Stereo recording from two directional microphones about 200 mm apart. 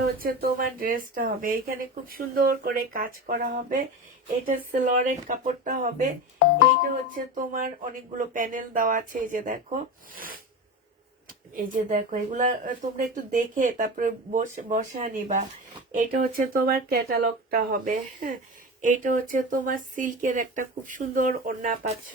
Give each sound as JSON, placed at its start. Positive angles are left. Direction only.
{"t": 0.2, "sound": "speech", "side_deg": -45}